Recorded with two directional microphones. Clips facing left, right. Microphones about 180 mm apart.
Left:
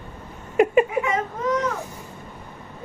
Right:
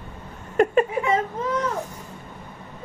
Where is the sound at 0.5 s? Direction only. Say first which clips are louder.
Left 1 dB; 10° left (ahead or behind).